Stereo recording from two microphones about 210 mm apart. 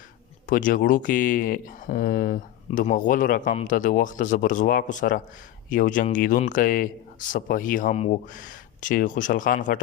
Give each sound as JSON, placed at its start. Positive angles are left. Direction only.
{"t": 0.4, "sound": "speech", "side_deg": 40}